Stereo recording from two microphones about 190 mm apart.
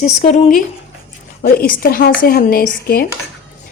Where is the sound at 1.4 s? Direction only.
50° left (ahead or behind).